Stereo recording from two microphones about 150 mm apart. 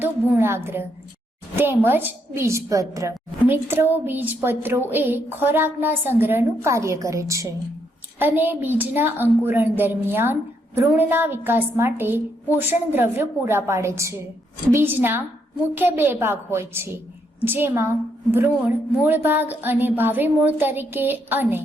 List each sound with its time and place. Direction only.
0.0 s a woman's voice: 15° right (ahead or behind)